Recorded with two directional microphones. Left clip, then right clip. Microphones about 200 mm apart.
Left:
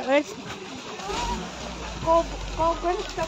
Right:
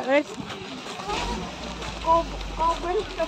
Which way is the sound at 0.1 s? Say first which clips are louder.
Even; 10° left (ahead or behind).